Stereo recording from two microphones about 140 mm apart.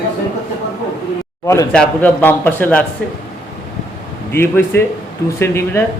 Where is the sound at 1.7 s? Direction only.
10° left (ahead or behind).